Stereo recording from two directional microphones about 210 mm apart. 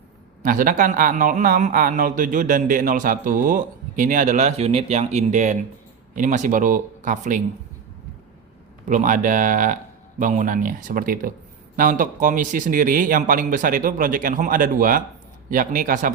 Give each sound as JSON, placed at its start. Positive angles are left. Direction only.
{"t": 0.4, "sound": "a man's voice", "side_deg": -40}
{"t": 8.9, "sound": "a man's voice", "side_deg": -35}